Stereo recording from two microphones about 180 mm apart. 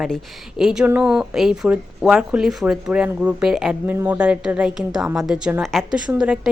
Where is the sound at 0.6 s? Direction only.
5° right (ahead or behind).